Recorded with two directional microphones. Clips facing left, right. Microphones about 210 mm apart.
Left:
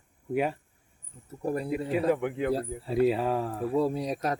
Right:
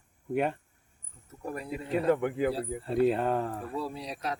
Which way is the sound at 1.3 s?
30° left (ahead or behind).